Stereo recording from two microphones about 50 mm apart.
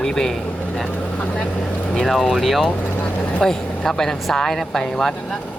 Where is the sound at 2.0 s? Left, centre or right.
Centre.